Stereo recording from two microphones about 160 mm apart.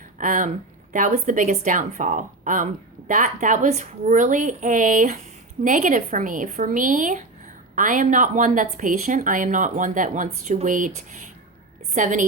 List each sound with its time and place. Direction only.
0.2 s a woman's voice: 55° right (ahead or behind)